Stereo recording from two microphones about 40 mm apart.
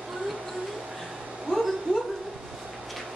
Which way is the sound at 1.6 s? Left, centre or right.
Centre.